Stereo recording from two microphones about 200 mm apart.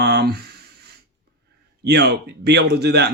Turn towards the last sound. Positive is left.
turn(degrees=-55)  # may be behind; listen again after turning